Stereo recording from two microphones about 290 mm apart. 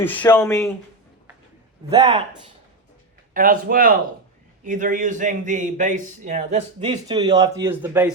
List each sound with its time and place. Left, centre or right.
0.0 s speech: centre
1.9 s a man's voice: centre
3.3 s a man's voice: right; by 8.1 s centre